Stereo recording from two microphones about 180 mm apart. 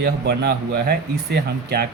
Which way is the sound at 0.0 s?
60° right (ahead or behind).